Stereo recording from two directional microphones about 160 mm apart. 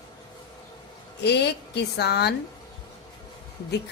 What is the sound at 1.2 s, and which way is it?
A woman's voice, 90° left.